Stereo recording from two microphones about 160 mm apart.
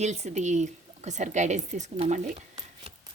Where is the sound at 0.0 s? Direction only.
45° right (ahead or behind).